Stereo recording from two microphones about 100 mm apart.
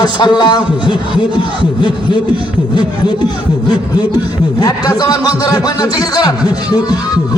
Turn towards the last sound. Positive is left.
turn(degrees=40)  # may be behind; listen again after turning